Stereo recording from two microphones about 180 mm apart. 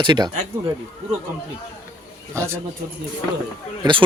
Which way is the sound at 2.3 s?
15° right (ahead or behind).